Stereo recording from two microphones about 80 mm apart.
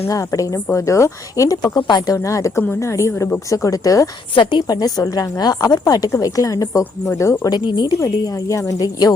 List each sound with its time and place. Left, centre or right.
0.1 s speech: left
2.1 s speech: left
4.4 s a woman's voice: left
4.6 s speech: left
7.5 s speech: left
7.9 s speech: left